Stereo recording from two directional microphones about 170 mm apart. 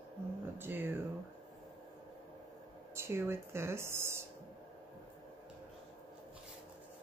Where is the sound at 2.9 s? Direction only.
15° right (ahead or behind).